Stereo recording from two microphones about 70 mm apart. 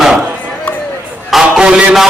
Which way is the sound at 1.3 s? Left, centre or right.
Centre.